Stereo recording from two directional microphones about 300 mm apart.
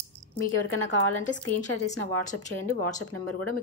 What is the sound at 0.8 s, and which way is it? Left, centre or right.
A woman's voice, left.